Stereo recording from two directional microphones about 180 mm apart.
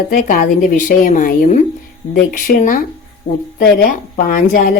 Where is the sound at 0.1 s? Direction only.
50° left (ahead or behind).